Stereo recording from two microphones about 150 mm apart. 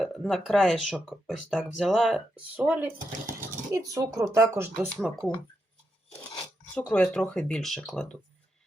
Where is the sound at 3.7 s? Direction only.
20° right (ahead or behind).